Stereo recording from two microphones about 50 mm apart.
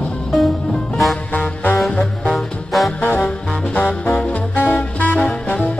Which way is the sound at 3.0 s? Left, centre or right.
Left.